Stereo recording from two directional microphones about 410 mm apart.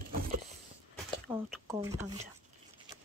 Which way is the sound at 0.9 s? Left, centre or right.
Centre.